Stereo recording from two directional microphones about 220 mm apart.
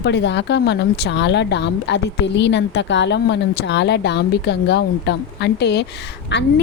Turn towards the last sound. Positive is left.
turn(degrees=50)  # may be behind; listen again after turning